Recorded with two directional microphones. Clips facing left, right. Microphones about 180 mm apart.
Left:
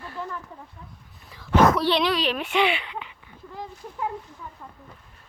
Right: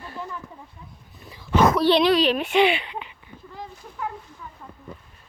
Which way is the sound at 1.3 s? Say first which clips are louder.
Even; 10° right (ahead or behind).